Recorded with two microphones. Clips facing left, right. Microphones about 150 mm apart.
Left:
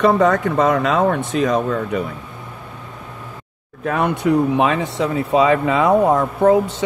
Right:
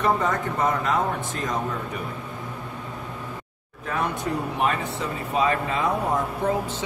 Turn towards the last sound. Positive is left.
turn(degrees=70)  # may be behind; listen again after turning